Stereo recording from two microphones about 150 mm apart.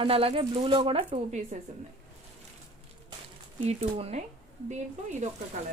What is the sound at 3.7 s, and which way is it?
Speech, 45° right (ahead or behind).